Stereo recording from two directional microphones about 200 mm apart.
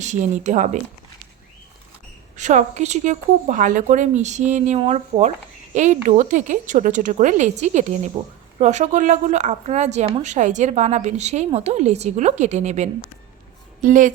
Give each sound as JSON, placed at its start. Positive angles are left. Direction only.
{"t": 0.0, "sound": "a woman's voice", "side_deg": -35}
{"t": 2.3, "sound": "a woman's voice", "side_deg": -35}